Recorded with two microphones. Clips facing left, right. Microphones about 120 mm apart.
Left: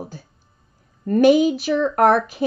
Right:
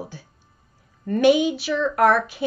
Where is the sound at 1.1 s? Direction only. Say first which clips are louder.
Left 3 dB; 40° left (ahead or behind).